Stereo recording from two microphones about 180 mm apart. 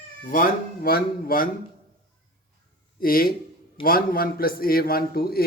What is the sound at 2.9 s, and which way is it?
A man's voice, 55° left (ahead or behind).